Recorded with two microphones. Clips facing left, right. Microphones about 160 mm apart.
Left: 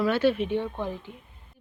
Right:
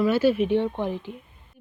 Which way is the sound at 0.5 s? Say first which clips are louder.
Right 5 dB; 20° right (ahead or behind).